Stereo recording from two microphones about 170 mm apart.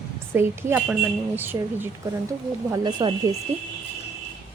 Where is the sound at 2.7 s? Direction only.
25° right (ahead or behind).